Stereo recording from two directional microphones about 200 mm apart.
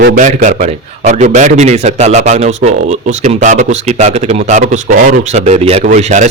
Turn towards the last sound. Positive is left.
turn(degrees=-40)  # may be behind; listen again after turning